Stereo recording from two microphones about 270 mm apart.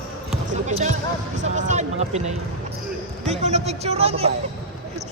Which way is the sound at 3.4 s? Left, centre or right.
Right.